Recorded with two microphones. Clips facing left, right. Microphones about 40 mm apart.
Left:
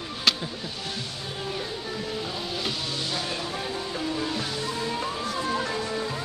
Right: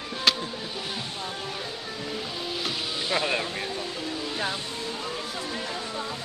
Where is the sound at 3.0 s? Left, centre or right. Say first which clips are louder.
Right 9 dB; right.